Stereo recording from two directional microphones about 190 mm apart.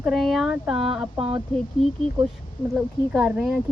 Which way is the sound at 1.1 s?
25° right (ahead or behind).